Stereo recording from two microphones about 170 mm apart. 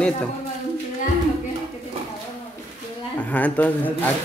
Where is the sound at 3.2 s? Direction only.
10° left (ahead or behind).